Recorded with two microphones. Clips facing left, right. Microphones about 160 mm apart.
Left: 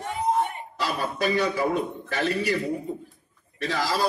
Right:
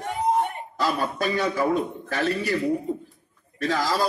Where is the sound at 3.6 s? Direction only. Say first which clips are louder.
Right 2 dB; 45° right (ahead or behind).